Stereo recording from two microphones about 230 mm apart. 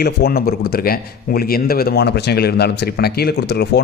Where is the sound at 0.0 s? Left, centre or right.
Left.